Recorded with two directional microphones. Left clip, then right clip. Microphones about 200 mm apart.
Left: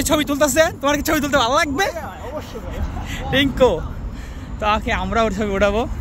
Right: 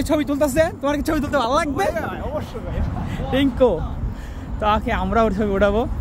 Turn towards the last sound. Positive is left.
turn(degrees=-10)  # may be behind; listen again after turning